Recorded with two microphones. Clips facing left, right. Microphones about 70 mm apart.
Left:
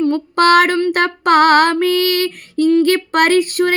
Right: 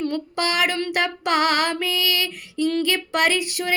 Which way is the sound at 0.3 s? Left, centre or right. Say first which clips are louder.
Left 12 dB; left.